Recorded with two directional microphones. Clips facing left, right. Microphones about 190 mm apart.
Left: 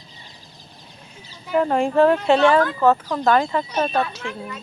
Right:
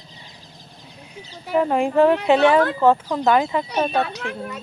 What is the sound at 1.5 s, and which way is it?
Speech, 10° right (ahead or behind).